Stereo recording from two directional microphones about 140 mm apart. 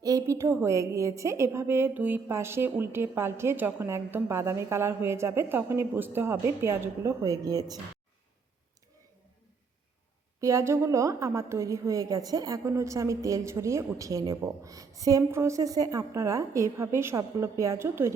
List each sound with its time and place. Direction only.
0.0 s a woman's voice: 25° right (ahead or behind)
10.4 s a woman's voice: 20° right (ahead or behind)